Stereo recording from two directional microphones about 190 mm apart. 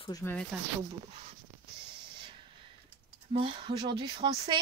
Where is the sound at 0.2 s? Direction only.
10° left (ahead or behind).